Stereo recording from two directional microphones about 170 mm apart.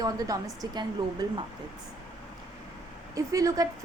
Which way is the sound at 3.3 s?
20° right (ahead or behind).